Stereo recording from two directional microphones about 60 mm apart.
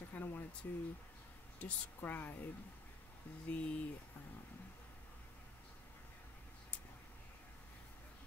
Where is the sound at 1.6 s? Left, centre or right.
Left.